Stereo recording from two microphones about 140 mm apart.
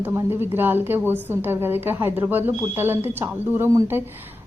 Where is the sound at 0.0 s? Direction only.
15° right (ahead or behind).